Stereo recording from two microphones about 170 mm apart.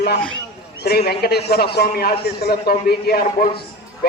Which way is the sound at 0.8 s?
70° left (ahead or behind).